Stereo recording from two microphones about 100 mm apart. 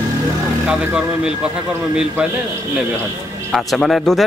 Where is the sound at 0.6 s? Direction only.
10° right (ahead or behind).